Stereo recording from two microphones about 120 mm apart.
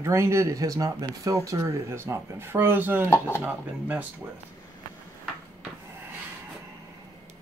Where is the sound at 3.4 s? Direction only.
15° right (ahead or behind).